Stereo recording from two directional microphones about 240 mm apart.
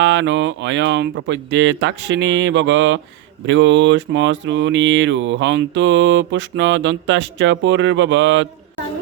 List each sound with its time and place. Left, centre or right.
0.0 s speech: right